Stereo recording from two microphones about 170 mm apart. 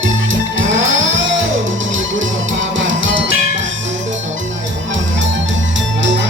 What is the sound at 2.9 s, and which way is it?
Music, 90° right.